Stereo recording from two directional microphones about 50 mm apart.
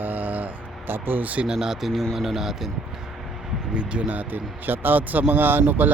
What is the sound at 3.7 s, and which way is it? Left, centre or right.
Speech, right.